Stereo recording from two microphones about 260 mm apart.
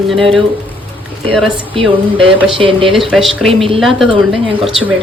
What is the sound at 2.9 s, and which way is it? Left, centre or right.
Speech, centre.